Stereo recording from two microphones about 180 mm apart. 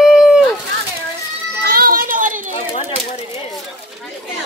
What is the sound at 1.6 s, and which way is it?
Children playing, 55° right (ahead or behind).